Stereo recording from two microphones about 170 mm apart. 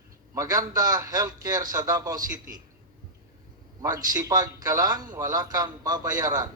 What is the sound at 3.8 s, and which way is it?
A man's voice, 20° right (ahead or behind).